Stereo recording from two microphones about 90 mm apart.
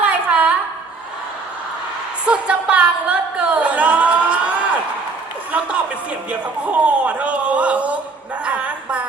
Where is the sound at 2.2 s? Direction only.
10° right (ahead or behind).